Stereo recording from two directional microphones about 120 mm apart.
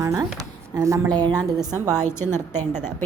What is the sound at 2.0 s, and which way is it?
Speech, 20° left (ahead or behind).